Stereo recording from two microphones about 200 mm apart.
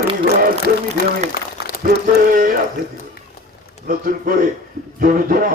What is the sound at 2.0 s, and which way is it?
Music, 40° right (ahead or behind).